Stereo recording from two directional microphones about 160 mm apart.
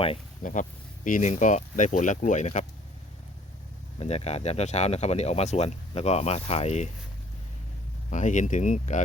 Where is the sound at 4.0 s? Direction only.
40° left (ahead or behind).